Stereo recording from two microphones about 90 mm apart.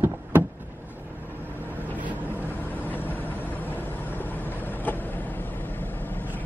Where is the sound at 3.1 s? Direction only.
20° left (ahead or behind).